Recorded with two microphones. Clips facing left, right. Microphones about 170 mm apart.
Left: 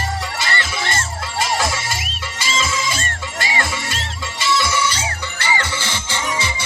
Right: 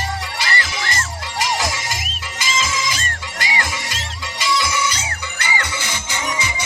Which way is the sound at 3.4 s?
25° left (ahead or behind).